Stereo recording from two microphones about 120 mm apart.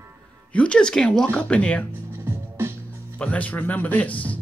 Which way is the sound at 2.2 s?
20° right (ahead or behind).